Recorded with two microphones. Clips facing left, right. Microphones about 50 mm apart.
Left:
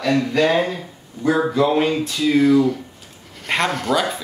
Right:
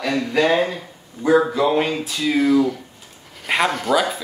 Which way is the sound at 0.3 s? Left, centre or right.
Centre.